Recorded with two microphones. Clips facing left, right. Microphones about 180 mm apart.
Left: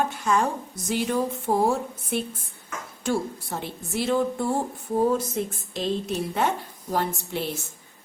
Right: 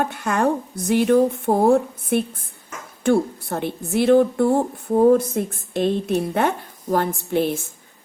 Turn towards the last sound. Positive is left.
turn(degrees=-55)  # may be behind; listen again after turning